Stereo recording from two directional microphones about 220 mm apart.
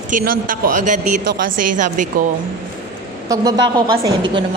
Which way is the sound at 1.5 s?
90° right.